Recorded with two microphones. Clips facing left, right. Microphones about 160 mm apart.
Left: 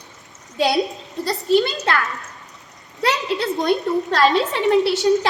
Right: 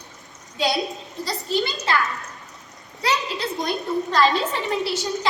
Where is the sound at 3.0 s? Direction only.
65° left (ahead or behind).